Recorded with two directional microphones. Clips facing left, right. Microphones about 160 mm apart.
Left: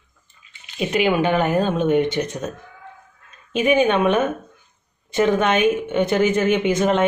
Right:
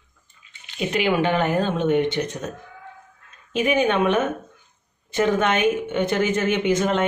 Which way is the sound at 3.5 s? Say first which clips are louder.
Left 3 dB; 20° left (ahead or behind).